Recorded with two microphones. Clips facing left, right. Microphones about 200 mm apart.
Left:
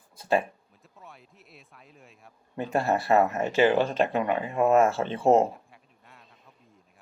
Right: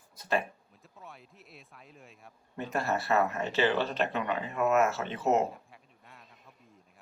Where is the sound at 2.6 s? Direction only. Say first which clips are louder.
Left 6 dB; 30° left (ahead or behind).